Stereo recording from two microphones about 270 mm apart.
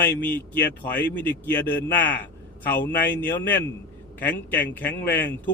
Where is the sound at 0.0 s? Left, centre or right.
Centre.